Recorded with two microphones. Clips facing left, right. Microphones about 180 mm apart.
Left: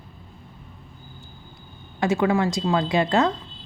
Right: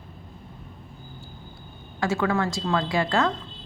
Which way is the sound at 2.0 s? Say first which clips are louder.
Left 3 dB; 20° left (ahead or behind).